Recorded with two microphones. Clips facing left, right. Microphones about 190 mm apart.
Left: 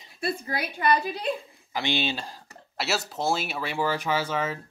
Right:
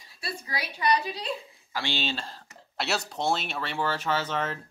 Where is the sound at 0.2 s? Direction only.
50° left (ahead or behind).